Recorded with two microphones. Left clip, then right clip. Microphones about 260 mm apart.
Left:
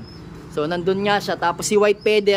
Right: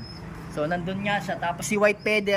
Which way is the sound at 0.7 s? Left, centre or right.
Centre.